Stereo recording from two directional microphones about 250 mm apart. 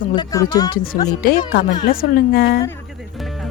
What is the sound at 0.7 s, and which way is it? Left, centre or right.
Speech, left.